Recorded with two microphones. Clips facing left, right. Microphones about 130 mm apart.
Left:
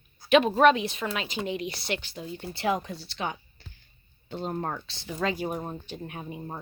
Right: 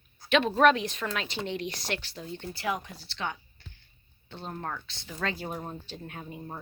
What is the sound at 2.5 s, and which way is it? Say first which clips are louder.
Speech: left 6 dB; 25° left (ahead or behind).